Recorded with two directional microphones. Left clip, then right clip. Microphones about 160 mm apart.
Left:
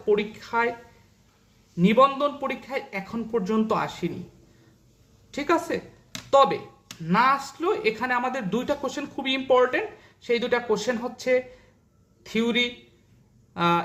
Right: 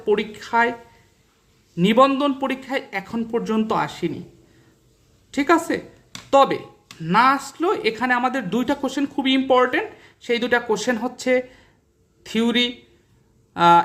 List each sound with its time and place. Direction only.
0.0 s speech: 35° right (ahead or behind)
1.7 s speech: 35° right (ahead or behind)
5.3 s speech: 30° right (ahead or behind)
13.5 s a sound: 35° right (ahead or behind)